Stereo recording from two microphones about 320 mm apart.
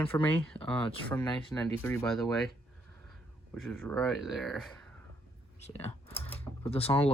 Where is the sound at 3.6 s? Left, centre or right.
Centre.